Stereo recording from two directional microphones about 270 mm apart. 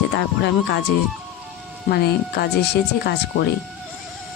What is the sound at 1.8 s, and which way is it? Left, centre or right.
Speech, left.